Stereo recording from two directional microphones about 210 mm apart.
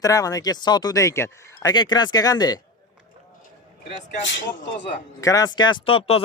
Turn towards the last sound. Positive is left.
turn(degrees=25)  # may be behind; listen again after turning